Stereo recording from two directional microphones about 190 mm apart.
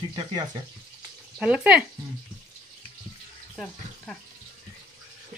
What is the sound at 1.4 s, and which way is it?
Speech, 5° right (ahead or behind).